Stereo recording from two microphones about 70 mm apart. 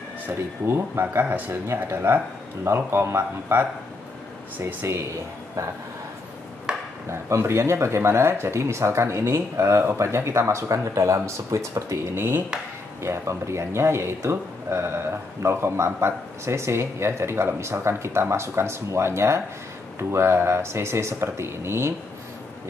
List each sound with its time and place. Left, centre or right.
0.3 s speech: right
6.7 s chop: centre
7.1 s speech: right
12.2 s speech: right